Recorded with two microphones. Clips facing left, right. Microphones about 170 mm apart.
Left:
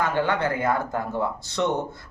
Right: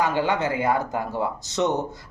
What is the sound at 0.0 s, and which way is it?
Speech, 15° right (ahead or behind).